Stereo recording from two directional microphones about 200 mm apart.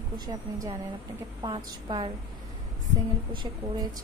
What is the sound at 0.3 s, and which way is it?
Speech, 20° right (ahead or behind).